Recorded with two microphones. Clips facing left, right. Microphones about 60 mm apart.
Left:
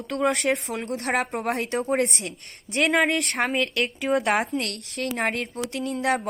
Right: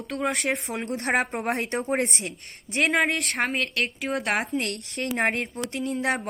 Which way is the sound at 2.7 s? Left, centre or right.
Centre.